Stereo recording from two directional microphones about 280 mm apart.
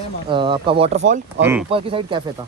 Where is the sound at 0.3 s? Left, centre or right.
Centre.